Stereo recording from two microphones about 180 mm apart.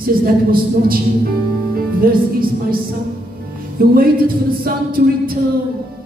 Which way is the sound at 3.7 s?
55° right (ahead or behind).